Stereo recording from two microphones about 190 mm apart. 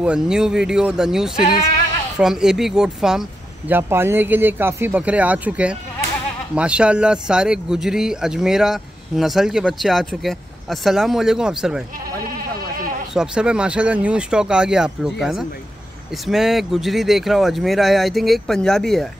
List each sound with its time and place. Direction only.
0.0 s speech: 5° right (ahead or behind)
12.3 s sheep: 50° right (ahead or behind)
13.1 s speech: 5° right (ahead or behind)